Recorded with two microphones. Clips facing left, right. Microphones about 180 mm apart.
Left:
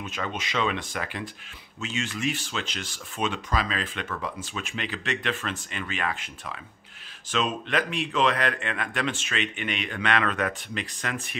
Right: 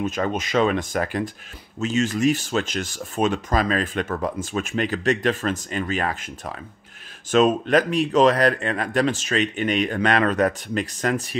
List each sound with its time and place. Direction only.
0.0 s a man's voice: 45° right (ahead or behind)